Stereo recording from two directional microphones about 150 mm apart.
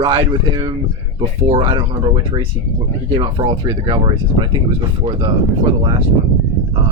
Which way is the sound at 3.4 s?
35° right (ahead or behind).